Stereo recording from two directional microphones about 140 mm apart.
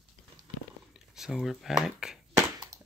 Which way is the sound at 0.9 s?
5° right (ahead or behind).